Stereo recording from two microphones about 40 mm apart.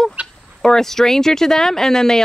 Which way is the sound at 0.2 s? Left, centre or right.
Right.